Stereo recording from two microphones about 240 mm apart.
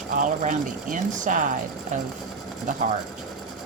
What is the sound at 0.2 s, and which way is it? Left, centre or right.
Speech, right.